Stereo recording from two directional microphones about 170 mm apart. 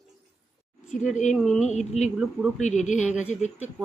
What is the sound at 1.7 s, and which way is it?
Speech, 40° left (ahead or behind).